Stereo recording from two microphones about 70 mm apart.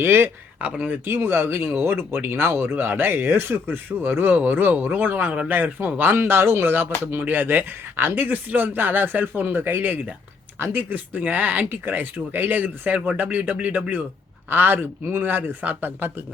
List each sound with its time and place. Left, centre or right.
0.0 s speech: right
0.6 s speech: centre
1.0 s speech: right